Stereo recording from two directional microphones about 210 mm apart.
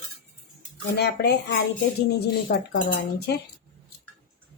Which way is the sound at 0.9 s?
50° left (ahead or behind).